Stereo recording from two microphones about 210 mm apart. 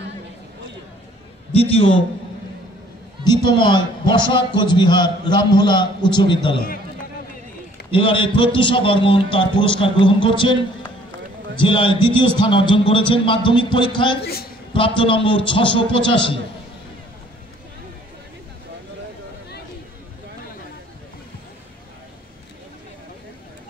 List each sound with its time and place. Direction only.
1.5 s a man's voice: 25° left (ahead or behind)
3.4 s a man's voice: 20° left (ahead or behind)
7.9 s a man's voice: 25° left (ahead or behind)